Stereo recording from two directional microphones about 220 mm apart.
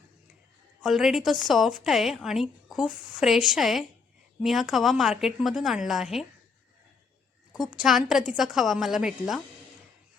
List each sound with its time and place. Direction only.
0.8 s a woman's voice: centre (ahead or behind)
7.5 s a woman's voice: 5° right (ahead or behind)